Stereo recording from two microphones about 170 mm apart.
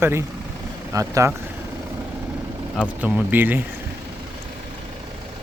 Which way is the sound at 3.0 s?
10° right (ahead or behind).